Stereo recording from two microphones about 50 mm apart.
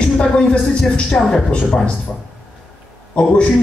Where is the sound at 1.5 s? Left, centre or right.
Left.